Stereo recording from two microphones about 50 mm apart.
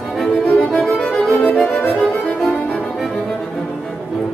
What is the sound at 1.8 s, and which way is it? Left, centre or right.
Music, centre.